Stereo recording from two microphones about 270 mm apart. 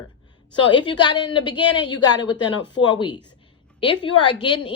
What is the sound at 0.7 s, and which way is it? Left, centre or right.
A woman's voice, centre.